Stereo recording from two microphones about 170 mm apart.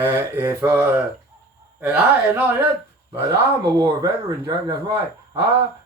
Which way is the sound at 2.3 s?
10° right (ahead or behind).